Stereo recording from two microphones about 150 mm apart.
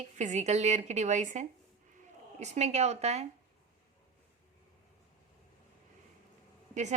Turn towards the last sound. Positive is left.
turn(degrees=-50)  # may be behind; listen again after turning